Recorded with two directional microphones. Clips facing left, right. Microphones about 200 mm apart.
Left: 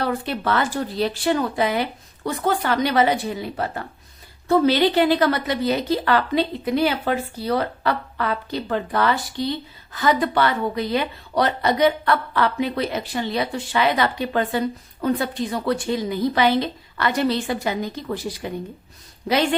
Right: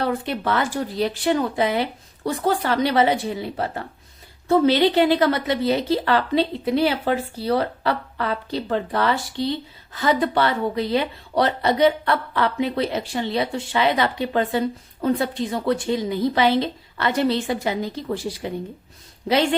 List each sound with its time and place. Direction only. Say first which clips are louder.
0.0 s speech: even; 20° right (ahead or behind)